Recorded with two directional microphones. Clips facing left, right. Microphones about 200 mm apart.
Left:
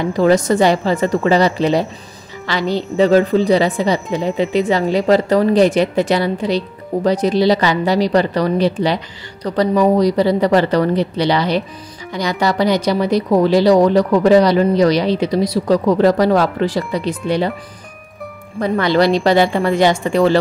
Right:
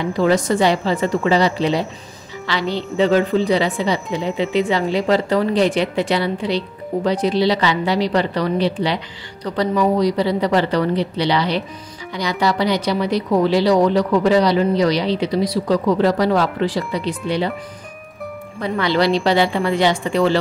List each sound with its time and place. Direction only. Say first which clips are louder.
0.2 s a woman's voice: left 3 dB; 45° left (ahead or behind)
18.6 s a woman's voice: left 4 dB; 45° left (ahead or behind)